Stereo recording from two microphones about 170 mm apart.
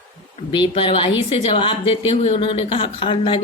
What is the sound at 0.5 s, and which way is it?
Speech, 30° left (ahead or behind).